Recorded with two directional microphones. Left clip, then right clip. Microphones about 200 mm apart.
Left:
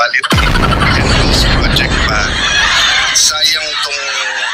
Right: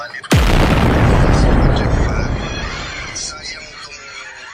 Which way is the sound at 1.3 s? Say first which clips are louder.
Left 5 dB; 45° left (ahead or behind).